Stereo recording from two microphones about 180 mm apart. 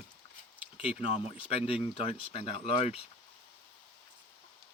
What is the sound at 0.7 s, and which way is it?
Speech, 30° left (ahead or behind).